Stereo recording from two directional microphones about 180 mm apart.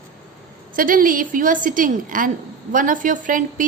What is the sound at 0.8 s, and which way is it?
A woman's voice, 50° right (ahead or behind).